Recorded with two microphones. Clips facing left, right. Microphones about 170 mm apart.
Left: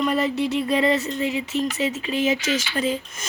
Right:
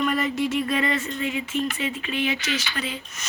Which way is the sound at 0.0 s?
30° left (ahead or behind).